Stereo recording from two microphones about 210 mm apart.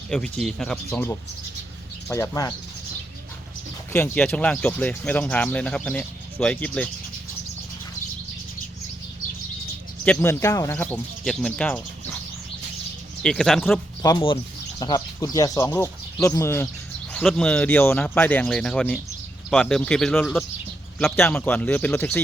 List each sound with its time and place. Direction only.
0.1 s speech: centre (ahead or behind)
3.9 s speech: 10° left (ahead or behind)
10.0 s speech: 10° left (ahead or behind)
13.2 s speech: centre (ahead or behind)
14.0 s speech: 15° left (ahead or behind)